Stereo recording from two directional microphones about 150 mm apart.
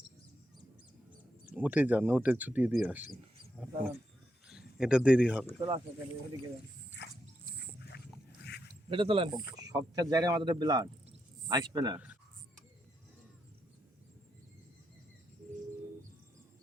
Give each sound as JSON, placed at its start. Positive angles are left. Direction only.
{"t": 1.5, "sound": "speech", "side_deg": -10}
{"t": 4.4, "sound": "speech", "side_deg": -5}
{"t": 5.5, "sound": "speech", "side_deg": -30}
{"t": 8.9, "sound": "speech", "side_deg": -35}
{"t": 9.6, "sound": "speech", "side_deg": -25}